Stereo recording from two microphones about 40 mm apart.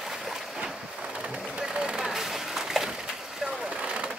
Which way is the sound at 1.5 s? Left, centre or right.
Right.